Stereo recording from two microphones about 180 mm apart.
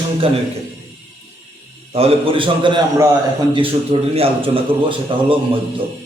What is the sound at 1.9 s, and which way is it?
Speech, 35° right (ahead or behind).